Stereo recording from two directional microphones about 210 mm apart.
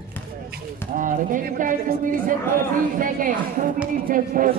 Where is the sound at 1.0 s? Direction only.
40° right (ahead or behind).